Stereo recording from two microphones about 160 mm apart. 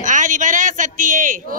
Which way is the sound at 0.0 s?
50° right (ahead or behind).